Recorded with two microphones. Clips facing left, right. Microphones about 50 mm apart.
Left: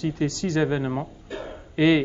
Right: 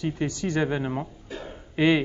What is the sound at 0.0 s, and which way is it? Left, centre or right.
Speech, centre.